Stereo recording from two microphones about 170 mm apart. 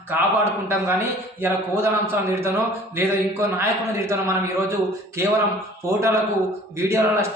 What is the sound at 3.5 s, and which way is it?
A man's voice, 15° right (ahead or behind).